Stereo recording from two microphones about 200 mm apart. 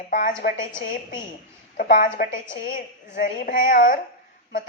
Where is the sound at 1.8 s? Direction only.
45° left (ahead or behind).